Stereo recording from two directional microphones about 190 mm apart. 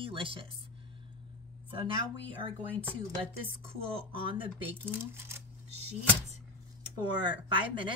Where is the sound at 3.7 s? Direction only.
30° right (ahead or behind).